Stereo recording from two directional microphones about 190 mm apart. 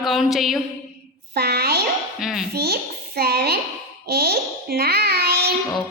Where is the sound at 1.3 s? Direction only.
55° right (ahead or behind).